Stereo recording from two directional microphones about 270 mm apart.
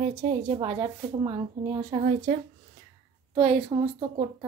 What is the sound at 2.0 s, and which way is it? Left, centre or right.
Speech, right.